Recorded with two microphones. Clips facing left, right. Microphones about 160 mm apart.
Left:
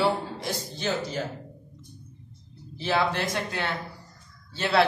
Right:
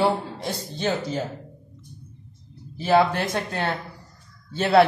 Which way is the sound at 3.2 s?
55° right (ahead or behind).